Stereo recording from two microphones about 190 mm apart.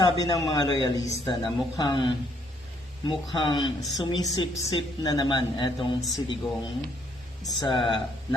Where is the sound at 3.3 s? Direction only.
25° left (ahead or behind).